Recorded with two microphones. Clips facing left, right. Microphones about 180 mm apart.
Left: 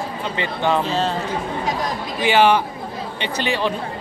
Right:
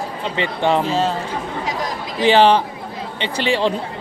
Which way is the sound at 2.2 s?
30° right (ahead or behind).